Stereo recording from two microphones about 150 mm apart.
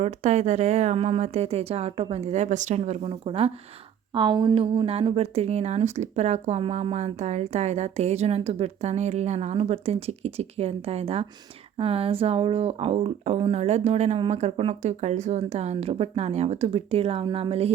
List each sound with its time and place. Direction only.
0.0 s speech: 50° right (ahead or behind)
4.1 s speech: 30° right (ahead or behind)